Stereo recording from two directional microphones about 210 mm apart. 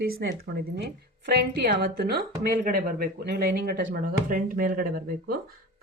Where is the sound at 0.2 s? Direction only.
50° right (ahead or behind).